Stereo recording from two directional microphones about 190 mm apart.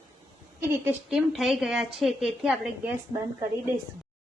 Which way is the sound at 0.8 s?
Centre (ahead or behind).